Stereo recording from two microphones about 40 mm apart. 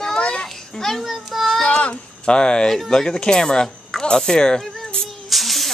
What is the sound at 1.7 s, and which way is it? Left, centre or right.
Speech, left.